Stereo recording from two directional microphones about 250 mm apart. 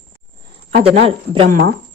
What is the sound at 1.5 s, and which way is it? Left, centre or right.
Speech, right.